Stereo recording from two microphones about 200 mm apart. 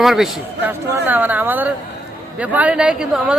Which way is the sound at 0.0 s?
Centre (ahead or behind).